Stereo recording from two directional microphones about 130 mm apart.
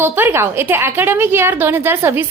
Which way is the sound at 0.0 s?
20° right (ahead or behind).